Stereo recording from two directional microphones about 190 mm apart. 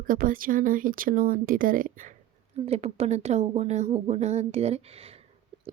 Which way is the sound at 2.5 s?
30° right (ahead or behind).